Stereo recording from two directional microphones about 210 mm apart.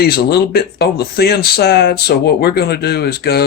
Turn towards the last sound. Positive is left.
turn(degrees=50)  # may be behind; listen again after turning